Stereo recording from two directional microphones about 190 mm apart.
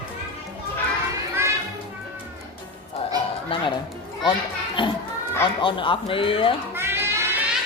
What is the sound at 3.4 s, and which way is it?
Speech, 25° left (ahead or behind).